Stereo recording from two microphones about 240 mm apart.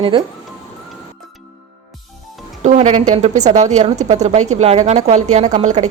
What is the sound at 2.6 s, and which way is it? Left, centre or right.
Speech, right.